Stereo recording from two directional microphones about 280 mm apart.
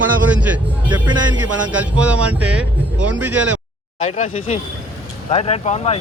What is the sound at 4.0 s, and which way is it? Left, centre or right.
Speech, left.